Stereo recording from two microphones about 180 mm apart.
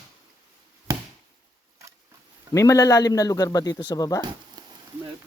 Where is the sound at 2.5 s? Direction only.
20° left (ahead or behind).